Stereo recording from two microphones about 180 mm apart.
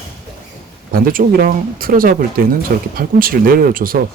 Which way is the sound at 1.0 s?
50° right (ahead or behind).